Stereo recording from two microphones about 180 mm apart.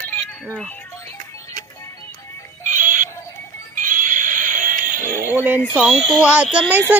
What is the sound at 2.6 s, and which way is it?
Synthetic singing, 45° right (ahead or behind).